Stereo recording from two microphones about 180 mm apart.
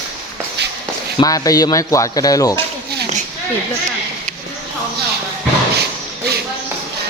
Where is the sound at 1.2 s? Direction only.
20° left (ahead or behind).